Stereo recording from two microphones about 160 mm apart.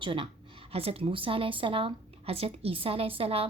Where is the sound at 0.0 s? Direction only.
30° right (ahead or behind).